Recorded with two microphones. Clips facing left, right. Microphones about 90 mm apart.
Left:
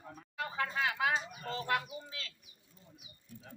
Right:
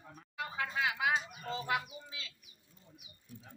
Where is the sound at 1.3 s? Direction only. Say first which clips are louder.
Left 1 dB; 5° right (ahead or behind).